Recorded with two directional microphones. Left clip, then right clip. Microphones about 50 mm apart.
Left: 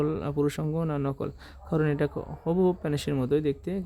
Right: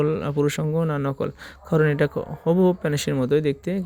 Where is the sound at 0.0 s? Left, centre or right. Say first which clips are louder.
Right 5 dB; right.